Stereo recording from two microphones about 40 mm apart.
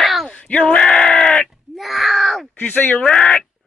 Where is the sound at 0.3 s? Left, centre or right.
Left.